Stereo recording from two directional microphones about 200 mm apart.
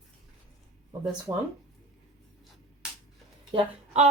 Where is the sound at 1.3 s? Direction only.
15° right (ahead or behind).